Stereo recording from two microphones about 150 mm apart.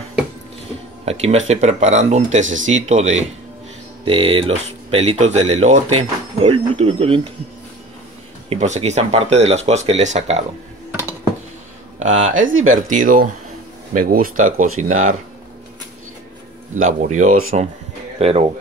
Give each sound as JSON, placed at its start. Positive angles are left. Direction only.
{"t": 1.0, "sound": "speech", "side_deg": -45}
{"t": 4.0, "sound": "speech", "side_deg": -35}
{"t": 8.5, "sound": "speech", "side_deg": -50}
{"t": 12.4, "sound": "speech", "side_deg": -65}
{"t": 16.7, "sound": "speech", "side_deg": -55}
{"t": 18.2, "sound": "speech", "side_deg": -45}